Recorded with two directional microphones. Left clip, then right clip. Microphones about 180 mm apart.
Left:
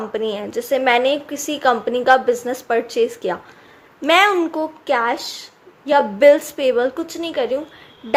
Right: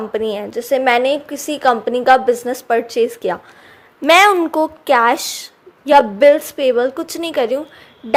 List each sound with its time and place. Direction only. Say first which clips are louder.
0.1 s a woman's voice: right 3 dB; 20° right (ahead or behind)
7.1 s speech: right 3 dB; 30° right (ahead or behind)